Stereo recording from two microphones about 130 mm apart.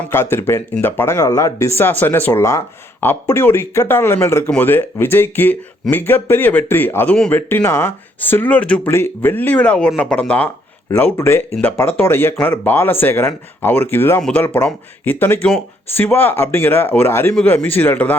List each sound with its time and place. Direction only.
0.1 s speech: 20° left (ahead or behind)
14.2 s speech: 5° left (ahead or behind)
14.4 s speech: 15° left (ahead or behind)